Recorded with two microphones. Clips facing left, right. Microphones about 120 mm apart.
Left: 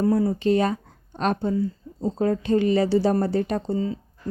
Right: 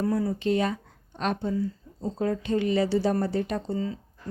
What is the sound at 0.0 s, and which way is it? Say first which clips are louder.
Speech: left 5 dB; 35° left (ahead or behind).